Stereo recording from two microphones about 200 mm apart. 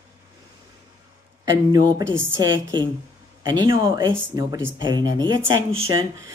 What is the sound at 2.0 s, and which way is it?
Speech, 70° right (ahead or behind).